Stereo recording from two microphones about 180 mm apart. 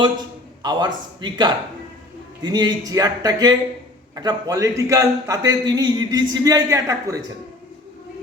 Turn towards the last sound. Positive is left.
turn(degrees=-15)  # may be behind; listen again after turning